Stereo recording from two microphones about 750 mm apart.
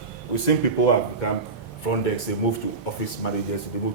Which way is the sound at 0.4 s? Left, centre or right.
Left.